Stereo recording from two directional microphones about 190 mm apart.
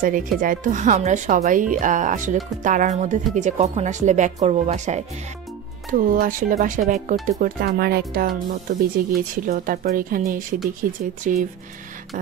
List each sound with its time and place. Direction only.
0.0 s speech: 45° right (ahead or behind)